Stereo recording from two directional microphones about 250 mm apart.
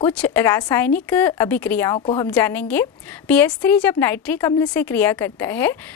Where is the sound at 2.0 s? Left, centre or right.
Left.